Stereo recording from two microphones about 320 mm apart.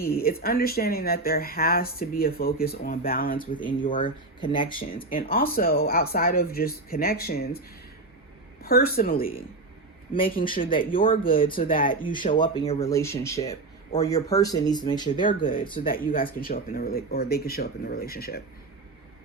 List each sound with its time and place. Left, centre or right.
0.0 s speech: left
3.5 s speech: centre
5.1 s speech: left
8.6 s speech: left; by 13.4 s centre
13.4 s speech: centre
15.2 s speech: left
15.9 s speech: left